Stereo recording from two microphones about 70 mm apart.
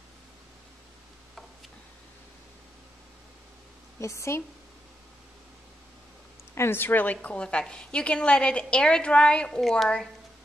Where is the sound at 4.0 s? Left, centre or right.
Left.